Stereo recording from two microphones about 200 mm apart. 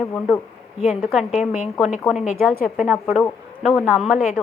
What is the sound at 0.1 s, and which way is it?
A woman's voice, 5° left (ahead or behind).